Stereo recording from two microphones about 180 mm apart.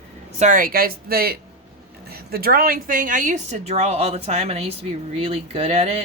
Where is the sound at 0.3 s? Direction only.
45° right (ahead or behind).